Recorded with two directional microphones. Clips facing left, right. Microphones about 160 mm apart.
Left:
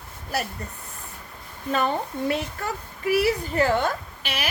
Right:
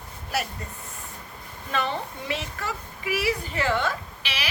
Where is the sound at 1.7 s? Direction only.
45° left (ahead or behind).